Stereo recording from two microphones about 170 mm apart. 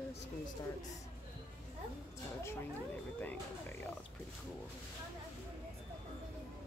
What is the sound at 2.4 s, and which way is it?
Speech, 10° left (ahead or behind).